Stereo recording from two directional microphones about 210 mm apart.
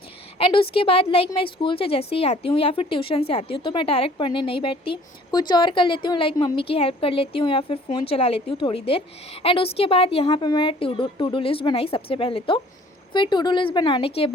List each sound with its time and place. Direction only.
0.3 s a woman's voice: 25° left (ahead or behind)